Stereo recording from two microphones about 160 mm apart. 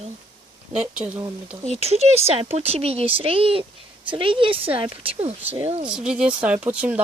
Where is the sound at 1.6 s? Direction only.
40° right (ahead or behind).